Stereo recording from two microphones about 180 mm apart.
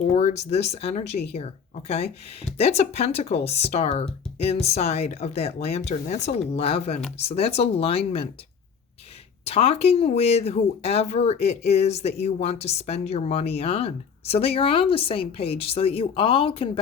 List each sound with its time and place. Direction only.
0.0 s speech: 45° left (ahead or behind)
2.6 s speech: 35° left (ahead or behind)
9.4 s speech: 35° left (ahead or behind)